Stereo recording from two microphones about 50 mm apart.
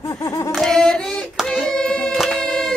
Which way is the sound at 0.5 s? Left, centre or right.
Centre.